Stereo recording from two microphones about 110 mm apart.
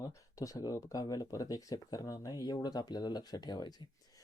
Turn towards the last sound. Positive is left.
turn(degrees=40)  # may be behind; listen again after turning